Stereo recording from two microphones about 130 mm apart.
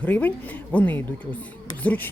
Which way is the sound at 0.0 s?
10° left (ahead or behind).